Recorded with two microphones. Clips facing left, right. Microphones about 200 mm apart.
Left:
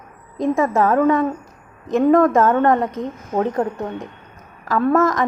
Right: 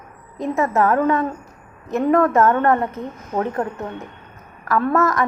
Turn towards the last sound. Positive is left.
turn(degrees=15)  # may be behind; listen again after turning